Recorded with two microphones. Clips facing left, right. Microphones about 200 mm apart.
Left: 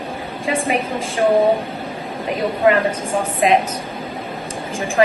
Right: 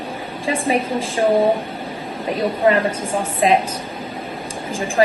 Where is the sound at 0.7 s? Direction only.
30° right (ahead or behind).